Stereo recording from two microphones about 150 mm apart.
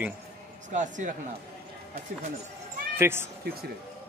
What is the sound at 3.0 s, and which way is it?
Speech, 15° right (ahead or behind).